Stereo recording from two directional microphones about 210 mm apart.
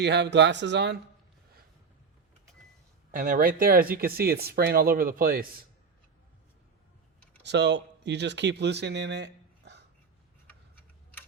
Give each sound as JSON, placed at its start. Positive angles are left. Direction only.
{"t": 0.0, "sound": "speech", "side_deg": -55}
{"t": 3.1, "sound": "speech", "side_deg": -40}
{"t": 7.4, "sound": "speech", "side_deg": -55}